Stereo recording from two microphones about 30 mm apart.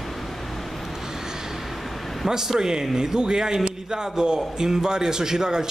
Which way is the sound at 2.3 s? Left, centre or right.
Centre.